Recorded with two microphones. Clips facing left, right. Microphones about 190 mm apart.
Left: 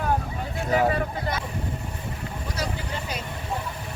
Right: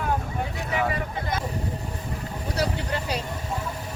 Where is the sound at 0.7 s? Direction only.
40° left (ahead or behind).